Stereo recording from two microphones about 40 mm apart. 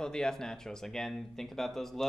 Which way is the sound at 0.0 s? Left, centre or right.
Centre.